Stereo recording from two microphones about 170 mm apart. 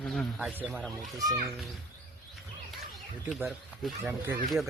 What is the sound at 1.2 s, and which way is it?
Speech, 20° right (ahead or behind).